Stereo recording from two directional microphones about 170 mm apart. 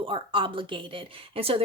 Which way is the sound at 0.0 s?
30° right (ahead or behind).